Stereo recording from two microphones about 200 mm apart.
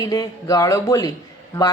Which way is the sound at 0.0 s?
20° left (ahead or behind).